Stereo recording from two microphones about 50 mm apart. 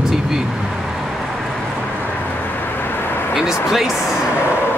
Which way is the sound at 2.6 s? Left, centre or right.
Left.